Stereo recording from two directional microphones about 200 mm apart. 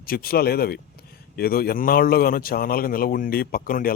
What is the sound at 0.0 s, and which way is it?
A man's voice, 50° left (ahead or behind).